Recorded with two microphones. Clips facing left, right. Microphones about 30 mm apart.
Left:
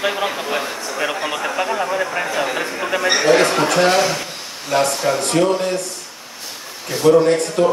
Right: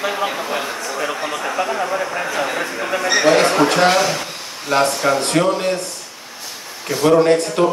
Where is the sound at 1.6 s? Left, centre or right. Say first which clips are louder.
Even; centre.